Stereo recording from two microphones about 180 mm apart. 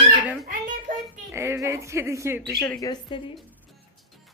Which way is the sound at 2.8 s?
25° left (ahead or behind).